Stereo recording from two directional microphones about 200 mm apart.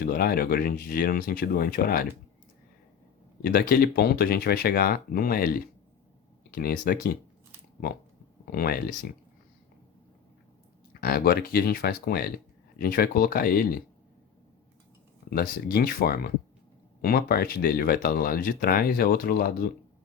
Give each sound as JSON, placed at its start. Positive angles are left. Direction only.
{"t": 0.0, "sound": "speech", "side_deg": 50}
{"t": 3.4, "sound": "speech", "side_deg": 50}
{"t": 8.5, "sound": "speech", "side_deg": 50}
{"t": 11.0, "sound": "speech", "side_deg": 50}
{"t": 15.3, "sound": "speech", "side_deg": 50}